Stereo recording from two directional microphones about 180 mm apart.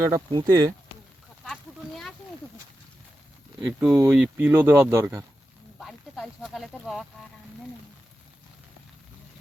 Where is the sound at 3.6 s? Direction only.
10° right (ahead or behind).